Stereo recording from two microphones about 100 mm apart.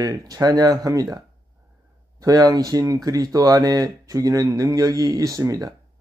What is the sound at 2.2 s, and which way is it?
Speech, 35° right (ahead or behind).